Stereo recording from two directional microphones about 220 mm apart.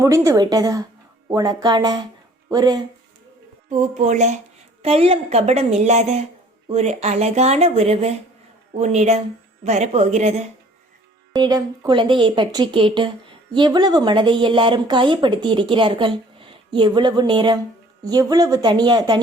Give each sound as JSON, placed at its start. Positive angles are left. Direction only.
{"t": 0.0, "sound": "a woman's voice", "side_deg": -15}
{"t": 3.7, "sound": "a woman's voice", "side_deg": -30}
{"t": 11.3, "sound": "speech", "side_deg": -15}